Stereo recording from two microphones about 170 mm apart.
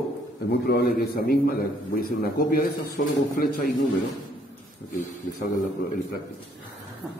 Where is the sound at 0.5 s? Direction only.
70° left (ahead or behind).